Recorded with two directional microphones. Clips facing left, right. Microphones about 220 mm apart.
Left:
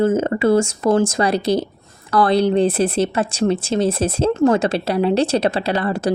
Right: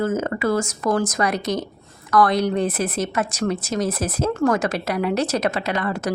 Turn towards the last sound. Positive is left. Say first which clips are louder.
# left 4 dB
turn(degrees=30)  # may be behind; listen again after turning